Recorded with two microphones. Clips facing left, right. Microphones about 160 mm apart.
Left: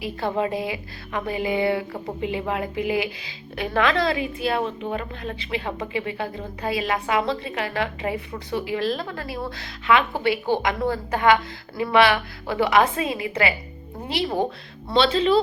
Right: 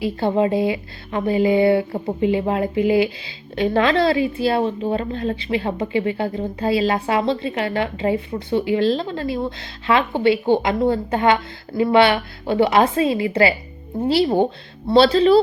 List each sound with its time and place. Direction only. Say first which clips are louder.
0.0 s speech: right 6 dB; 30° right (ahead or behind)